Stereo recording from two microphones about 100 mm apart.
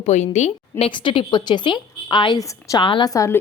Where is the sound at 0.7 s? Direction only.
65° left (ahead or behind).